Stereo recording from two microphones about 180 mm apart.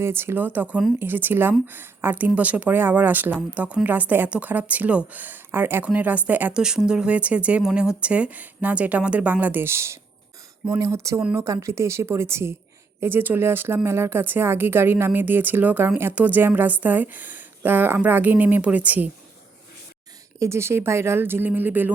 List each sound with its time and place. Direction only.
0.0 s speech: 15° right (ahead or behind)
11.2 s speech: 5° right (ahead or behind)
11.4 s speech: 15° right (ahead or behind)
20.4 s speech: 15° right (ahead or behind)